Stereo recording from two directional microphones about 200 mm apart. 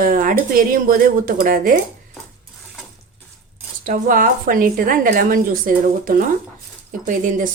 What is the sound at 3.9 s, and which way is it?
A woman's voice, 40° right (ahead or behind).